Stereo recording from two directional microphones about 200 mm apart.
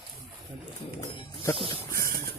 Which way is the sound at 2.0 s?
45° right (ahead or behind).